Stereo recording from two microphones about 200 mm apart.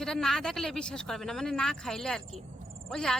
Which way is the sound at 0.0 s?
Centre (ahead or behind).